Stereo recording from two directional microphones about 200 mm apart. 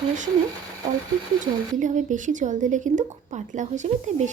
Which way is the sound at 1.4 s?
40° right (ahead or behind).